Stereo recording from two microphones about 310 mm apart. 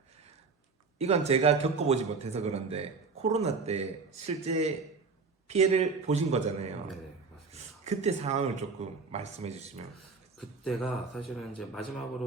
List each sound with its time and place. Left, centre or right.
0.9 s a man's voice: centre
10.3 s speech: centre